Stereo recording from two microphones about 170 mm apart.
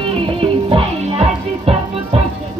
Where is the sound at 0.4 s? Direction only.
30° right (ahead or behind).